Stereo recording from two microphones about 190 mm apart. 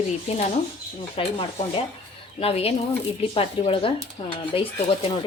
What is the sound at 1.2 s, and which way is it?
Speech, 30° left (ahead or behind).